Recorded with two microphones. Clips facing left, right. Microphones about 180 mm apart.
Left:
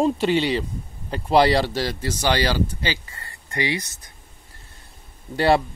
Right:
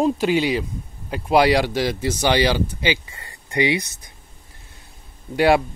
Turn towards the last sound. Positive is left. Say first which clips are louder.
# right 2 dB
turn(degrees=-10)  # may be behind; listen again after turning